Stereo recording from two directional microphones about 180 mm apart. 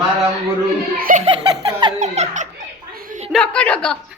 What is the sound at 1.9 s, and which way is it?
Giggle, 40° right (ahead or behind).